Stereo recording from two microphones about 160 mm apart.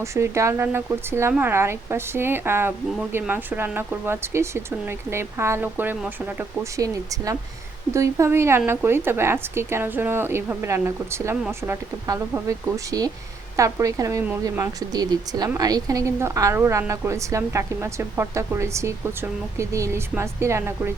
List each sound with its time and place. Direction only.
0.0 s speech: 20° right (ahead or behind)
6.7 s a woman's voice: 20° right (ahead or behind)